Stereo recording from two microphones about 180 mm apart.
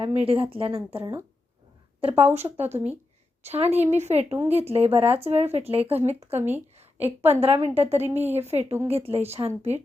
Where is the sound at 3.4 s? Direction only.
35° right (ahead or behind).